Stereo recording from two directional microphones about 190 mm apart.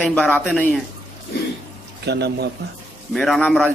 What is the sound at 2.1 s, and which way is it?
Speech, 60° right (ahead or behind).